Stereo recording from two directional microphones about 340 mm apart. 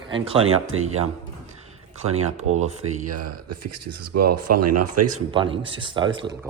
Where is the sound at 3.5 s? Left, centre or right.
Right.